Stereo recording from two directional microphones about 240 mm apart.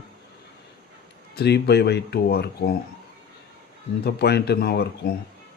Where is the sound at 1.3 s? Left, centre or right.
Left.